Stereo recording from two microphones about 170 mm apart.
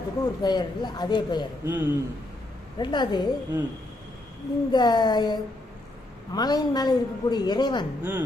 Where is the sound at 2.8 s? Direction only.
25° left (ahead or behind).